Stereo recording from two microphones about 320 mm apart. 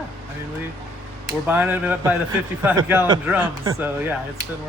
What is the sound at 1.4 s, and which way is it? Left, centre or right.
Speech, centre.